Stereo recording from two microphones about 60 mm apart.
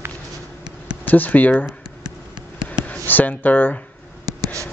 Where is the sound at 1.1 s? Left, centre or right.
Left.